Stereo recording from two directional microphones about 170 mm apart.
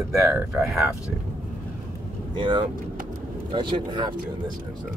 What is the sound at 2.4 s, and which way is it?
Speech, 30° right (ahead or behind).